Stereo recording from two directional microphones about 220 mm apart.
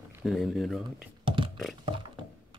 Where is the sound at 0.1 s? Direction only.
Centre (ahead or behind).